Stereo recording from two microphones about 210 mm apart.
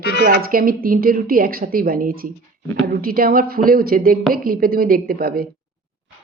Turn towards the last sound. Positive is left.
turn(degrees=-45)  # may be behind; listen again after turning